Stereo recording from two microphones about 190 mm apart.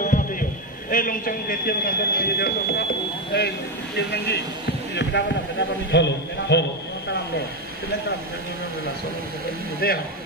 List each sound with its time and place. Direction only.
0.0 s a man's voice: 45° left (ahead or behind)
9.8 s speech: 55° left (ahead or behind)